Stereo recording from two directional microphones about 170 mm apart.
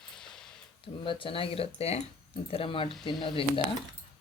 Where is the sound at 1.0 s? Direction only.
30° left (ahead or behind).